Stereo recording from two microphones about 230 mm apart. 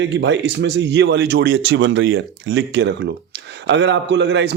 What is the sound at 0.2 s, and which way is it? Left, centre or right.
A man's voice, right.